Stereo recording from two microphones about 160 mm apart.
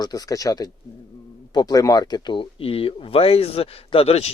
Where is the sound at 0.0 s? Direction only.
20° left (ahead or behind).